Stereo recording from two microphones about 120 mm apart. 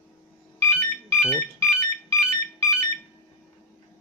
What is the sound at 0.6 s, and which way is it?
Ringtone, 25° left (ahead or behind).